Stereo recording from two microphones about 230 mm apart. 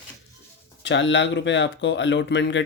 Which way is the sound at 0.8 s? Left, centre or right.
Left.